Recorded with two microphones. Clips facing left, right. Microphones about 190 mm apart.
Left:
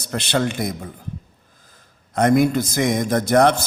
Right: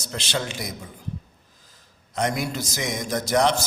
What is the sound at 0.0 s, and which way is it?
Speech, 60° left (ahead or behind).